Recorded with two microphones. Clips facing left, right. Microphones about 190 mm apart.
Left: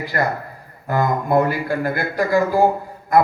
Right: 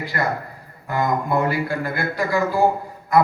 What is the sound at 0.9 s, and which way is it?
A man's voice, 50° left (ahead or behind).